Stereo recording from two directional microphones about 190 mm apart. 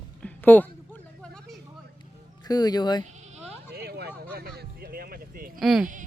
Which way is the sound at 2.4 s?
20° left (ahead or behind).